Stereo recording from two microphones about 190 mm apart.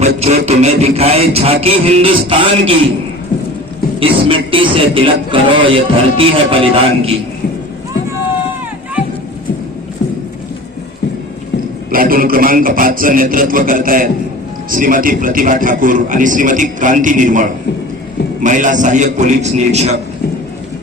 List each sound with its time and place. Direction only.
0.2 s beatboxing: 35° right (ahead or behind)
4.0 s a man's voice: 25° right (ahead or behind)
11.9 s a man's voice: 50° right (ahead or behind)
18.4 s beatboxing: 40° right (ahead or behind)